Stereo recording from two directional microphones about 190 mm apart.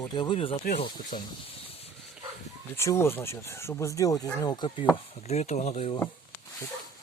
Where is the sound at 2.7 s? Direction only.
15° left (ahead or behind).